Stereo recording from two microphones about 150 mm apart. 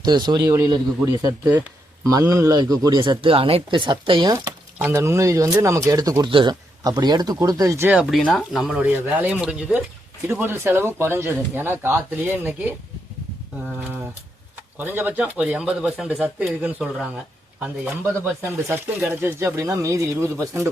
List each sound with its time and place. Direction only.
0.0 s speech: 30° right (ahead or behind)
4.8 s speech: 15° right (ahead or behind)
7.9 s speech: 10° right (ahead or behind)
14.8 s speech: 10° right (ahead or behind)
18.4 s speech: 15° right (ahead or behind)